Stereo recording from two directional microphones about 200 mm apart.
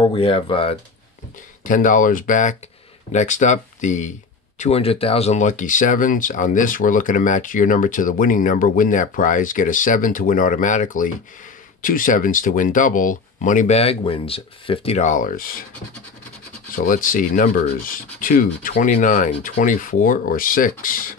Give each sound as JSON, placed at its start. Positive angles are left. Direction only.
{"t": 0.0, "sound": "speech", "side_deg": 25}
{"t": 1.6, "sound": "speech", "side_deg": 40}
{"t": 16.7, "sound": "speech", "side_deg": 45}